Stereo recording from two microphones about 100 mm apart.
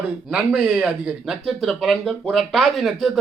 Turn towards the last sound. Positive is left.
turn(degrees=0)  # may be behind; listen again after turning